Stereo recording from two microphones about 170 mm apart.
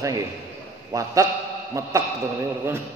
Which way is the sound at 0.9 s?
20° right (ahead or behind).